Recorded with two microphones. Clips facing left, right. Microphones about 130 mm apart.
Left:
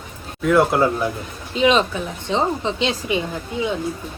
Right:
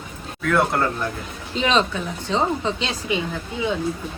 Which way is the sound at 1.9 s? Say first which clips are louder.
Left 1 dB; 25° left (ahead or behind).